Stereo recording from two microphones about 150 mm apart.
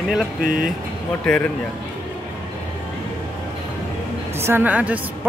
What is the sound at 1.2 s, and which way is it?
Speech, 10° left (ahead or behind).